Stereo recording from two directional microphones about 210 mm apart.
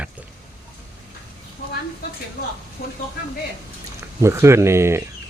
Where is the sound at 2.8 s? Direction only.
45° left (ahead or behind).